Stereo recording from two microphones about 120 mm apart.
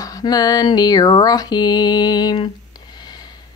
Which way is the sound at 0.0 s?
30° left (ahead or behind).